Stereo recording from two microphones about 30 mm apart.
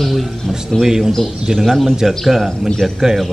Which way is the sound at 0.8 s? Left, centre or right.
Centre.